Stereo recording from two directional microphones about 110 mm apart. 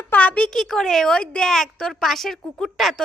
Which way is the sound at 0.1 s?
15° left (ahead or behind).